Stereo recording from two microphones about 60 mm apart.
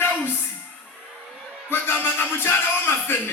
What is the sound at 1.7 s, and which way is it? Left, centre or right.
Music, left.